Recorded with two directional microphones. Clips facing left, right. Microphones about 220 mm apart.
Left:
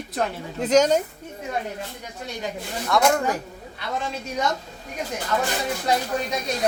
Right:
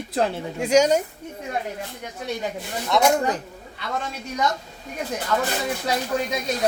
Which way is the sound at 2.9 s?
20° right (ahead or behind).